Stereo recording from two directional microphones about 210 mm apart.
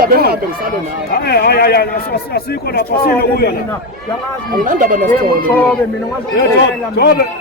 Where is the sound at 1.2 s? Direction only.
50° left (ahead or behind).